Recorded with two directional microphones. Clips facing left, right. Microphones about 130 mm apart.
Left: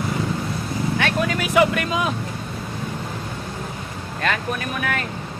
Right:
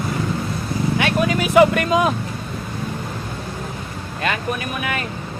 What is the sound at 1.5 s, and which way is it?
Speech, 45° right (ahead or behind).